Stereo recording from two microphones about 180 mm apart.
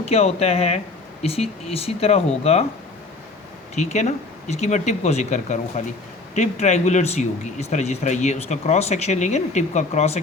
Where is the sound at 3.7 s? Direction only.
40° left (ahead or behind).